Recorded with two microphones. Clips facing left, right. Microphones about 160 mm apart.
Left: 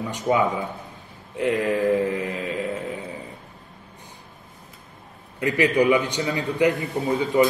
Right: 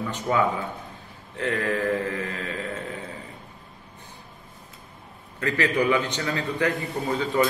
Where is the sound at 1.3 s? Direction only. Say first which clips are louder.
Left 4 dB; 15° left (ahead or behind).